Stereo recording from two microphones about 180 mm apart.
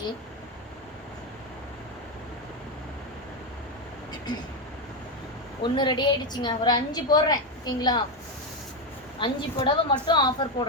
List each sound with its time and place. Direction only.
5.6 s a woman's voice: 25° left (ahead or behind)
9.1 s a woman's voice: 25° left (ahead or behind)